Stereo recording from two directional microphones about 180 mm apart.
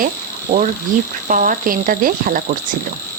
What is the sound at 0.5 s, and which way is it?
A woman's voice, 50° right (ahead or behind).